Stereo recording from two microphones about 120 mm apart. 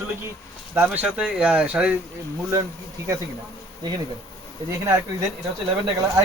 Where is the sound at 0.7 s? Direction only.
15° right (ahead or behind).